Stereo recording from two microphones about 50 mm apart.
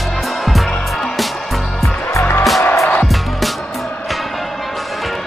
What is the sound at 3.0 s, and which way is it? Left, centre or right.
Music, centre.